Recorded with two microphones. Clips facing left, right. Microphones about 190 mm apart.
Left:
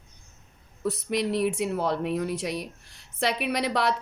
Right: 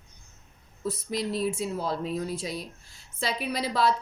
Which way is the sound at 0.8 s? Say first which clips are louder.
Left 4 dB; 70° left (ahead or behind).